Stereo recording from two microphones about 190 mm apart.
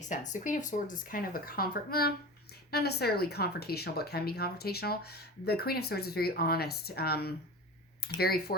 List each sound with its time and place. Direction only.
0.0 s speech: 40° left (ahead or behind); by 8.5 s 55° left (ahead or behind)